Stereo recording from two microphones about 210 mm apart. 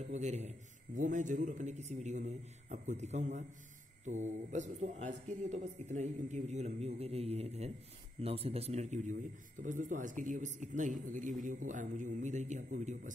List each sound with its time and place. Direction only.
0.1 s a man's voice: 35° right (ahead or behind)